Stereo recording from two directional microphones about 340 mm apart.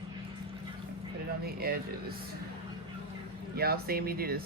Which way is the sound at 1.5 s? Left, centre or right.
Right.